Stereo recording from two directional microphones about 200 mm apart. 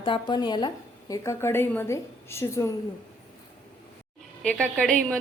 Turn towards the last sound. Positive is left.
turn(degrees=5)  # may be behind; listen again after turning